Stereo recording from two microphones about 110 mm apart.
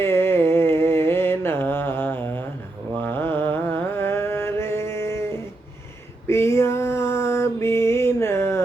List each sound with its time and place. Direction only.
0.0 s mantra: 20° left (ahead or behind)
3.3 s music: 20° left (ahead or behind)
6.2 s music: 25° left (ahead or behind)